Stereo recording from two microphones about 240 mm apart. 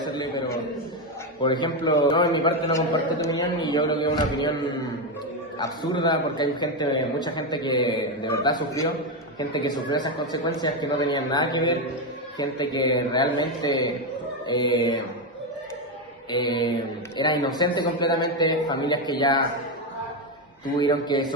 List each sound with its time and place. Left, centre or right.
0.0 s a man's voice: centre
5.5 s a man's voice: centre
16.3 s a man's voice: centre
20.7 s a man's voice: centre